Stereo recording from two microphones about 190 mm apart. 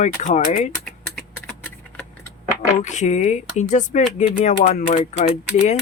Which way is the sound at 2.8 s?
40° left (ahead or behind).